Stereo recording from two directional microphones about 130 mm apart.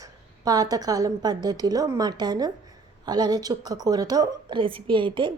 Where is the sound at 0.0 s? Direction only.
30° right (ahead or behind).